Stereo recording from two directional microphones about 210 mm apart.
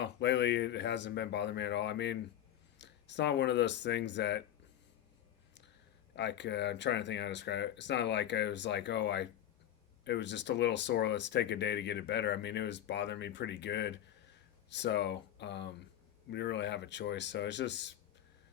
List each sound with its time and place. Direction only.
0.0 s speech: 55° left (ahead or behind)
6.1 s speech: 55° left (ahead or behind)